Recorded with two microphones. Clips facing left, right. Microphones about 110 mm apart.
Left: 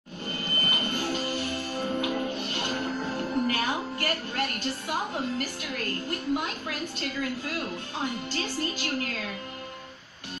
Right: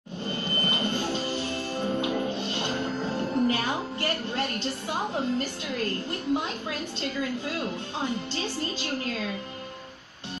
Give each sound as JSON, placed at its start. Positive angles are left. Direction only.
{"t": 0.3, "sound": "music", "side_deg": -25}
{"t": 3.4, "sound": "a woman's voice", "side_deg": -25}